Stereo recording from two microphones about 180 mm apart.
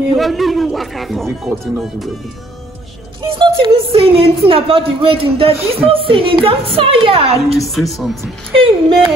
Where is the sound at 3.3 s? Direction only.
25° right (ahead or behind).